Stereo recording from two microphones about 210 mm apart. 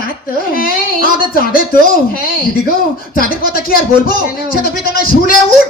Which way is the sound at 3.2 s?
45° left (ahead or behind).